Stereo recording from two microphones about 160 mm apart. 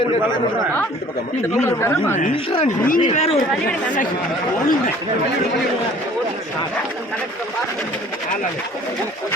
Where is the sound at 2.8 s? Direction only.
60° left (ahead or behind).